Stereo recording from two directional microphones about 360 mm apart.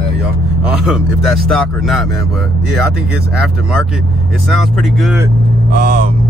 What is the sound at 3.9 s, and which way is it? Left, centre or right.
Speech, centre.